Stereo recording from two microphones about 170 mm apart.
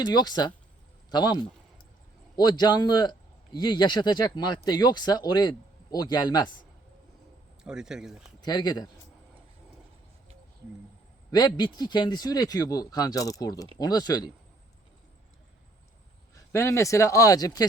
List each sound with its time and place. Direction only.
0.0 s speech: 25° left (ahead or behind)
7.6 s speech: 5° right (ahead or behind)
8.4 s speech: 25° left (ahead or behind)
11.3 s speech: 25° left (ahead or behind)
16.3 s speech: 15° left (ahead or behind)